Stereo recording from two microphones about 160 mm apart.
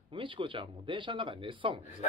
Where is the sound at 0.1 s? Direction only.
30° right (ahead or behind).